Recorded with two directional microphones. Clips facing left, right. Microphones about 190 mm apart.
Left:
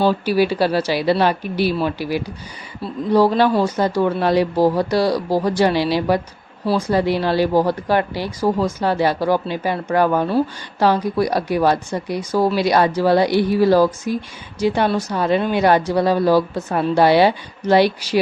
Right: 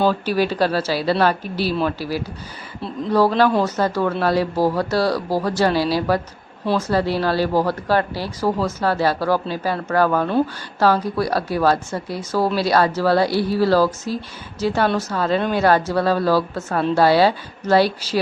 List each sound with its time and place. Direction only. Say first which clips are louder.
0.1 s speech: left 3 dB; 10° left (ahead or behind)